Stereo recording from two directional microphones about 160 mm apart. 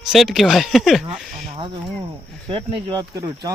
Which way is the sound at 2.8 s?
20° right (ahead or behind).